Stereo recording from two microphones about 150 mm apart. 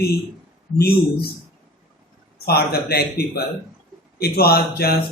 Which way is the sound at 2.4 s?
90° left.